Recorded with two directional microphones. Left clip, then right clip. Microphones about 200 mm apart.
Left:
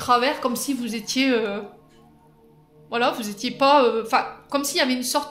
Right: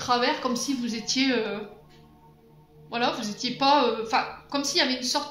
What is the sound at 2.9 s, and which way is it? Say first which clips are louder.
Speech: left 4 dB; 60° left (ahead or behind).